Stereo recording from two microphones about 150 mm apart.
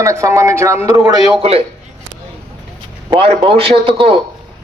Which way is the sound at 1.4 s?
40° right (ahead or behind).